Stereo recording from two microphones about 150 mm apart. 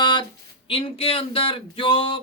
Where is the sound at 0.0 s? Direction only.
30° left (ahead or behind).